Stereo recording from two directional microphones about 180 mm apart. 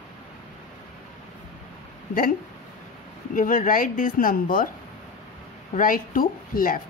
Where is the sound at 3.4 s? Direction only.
45° left (ahead or behind).